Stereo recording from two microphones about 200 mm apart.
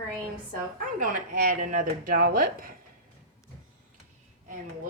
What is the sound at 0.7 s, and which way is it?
Speech, 40° right (ahead or behind).